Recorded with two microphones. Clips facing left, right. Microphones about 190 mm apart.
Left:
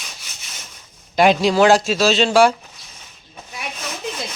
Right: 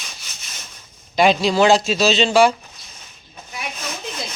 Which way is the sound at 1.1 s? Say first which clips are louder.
Left 1 dB; 10° left (ahead or behind).